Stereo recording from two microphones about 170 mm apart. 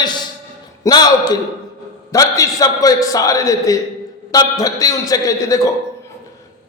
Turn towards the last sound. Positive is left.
turn(degrees=20)  # may be behind; listen again after turning